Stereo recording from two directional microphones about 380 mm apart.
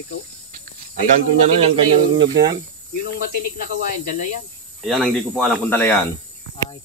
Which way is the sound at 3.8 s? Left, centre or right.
Left.